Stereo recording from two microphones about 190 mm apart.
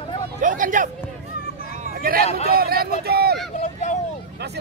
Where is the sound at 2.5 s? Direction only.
55° right (ahead or behind).